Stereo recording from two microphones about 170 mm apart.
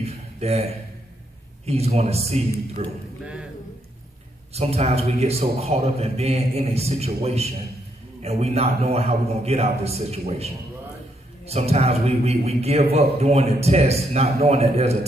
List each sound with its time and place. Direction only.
0.0 s a sound: 40° right (ahead or behind)
1.7 s a man's voice: 40° right (ahead or behind)
4.6 s a man's voice: 40° right (ahead or behind)